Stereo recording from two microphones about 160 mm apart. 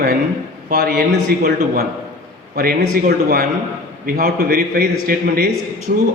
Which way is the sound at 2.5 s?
70° right (ahead or behind).